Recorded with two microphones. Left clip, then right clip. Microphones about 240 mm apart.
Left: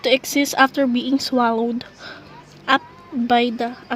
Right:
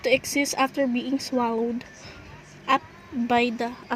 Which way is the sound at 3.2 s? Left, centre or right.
Centre.